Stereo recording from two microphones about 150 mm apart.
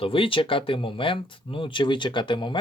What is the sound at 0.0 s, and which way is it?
Speech, 35° left (ahead or behind).